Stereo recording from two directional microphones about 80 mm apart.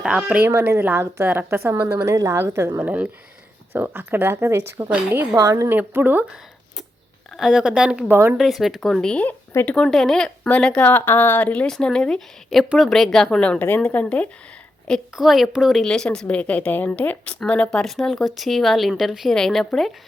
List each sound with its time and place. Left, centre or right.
0.0 s speech: centre
0.4 s a woman's voice: right
2.7 s a woman's voice: right
5.1 s a woman's voice: right
5.4 s speech: right
5.6 s a woman's voice: right
7.3 s speech: centre
8.1 s a woman's voice: right
8.4 s speech: centre
13.4 s speech: centre
15.1 s speech: centre
15.8 s speech: centre